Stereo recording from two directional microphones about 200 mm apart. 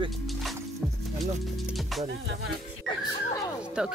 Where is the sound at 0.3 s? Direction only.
Centre (ahead or behind).